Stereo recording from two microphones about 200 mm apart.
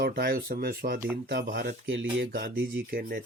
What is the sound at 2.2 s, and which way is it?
Speech, 50° right (ahead or behind).